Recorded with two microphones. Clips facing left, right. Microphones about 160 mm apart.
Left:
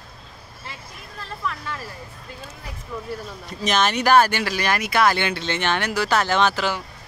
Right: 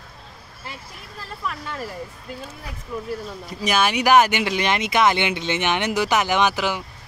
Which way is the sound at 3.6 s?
10° right (ahead or behind).